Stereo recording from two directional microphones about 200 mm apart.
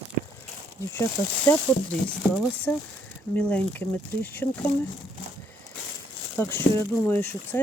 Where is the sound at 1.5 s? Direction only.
10° left (ahead or behind).